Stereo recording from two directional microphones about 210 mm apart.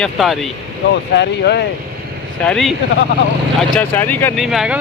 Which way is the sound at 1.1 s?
50° left (ahead or behind).